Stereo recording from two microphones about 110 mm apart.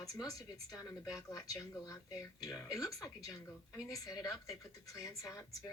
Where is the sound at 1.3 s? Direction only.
30° left (ahead or behind).